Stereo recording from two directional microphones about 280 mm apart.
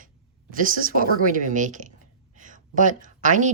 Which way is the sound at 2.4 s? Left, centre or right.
Right.